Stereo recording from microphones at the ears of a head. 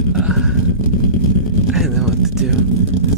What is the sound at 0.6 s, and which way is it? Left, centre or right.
Vehicle, right.